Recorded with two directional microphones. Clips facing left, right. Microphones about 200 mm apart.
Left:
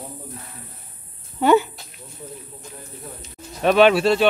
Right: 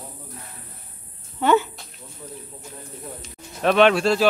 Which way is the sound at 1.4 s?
10° left (ahead or behind).